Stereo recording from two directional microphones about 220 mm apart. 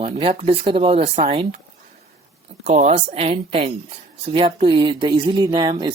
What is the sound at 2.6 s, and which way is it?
Speech, 30° right (ahead or behind).